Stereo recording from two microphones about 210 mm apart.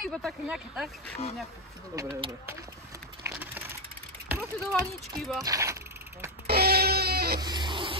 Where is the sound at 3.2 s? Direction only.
10° right (ahead or behind).